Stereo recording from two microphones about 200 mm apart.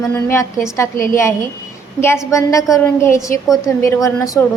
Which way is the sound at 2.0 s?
15° left (ahead or behind).